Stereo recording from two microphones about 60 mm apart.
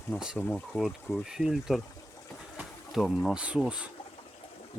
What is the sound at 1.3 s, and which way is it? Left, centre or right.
Speech, centre.